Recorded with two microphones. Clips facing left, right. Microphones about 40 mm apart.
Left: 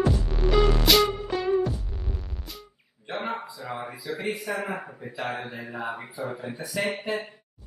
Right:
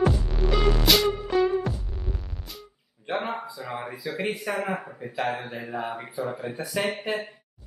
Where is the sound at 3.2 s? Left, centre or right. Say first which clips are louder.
Even; centre.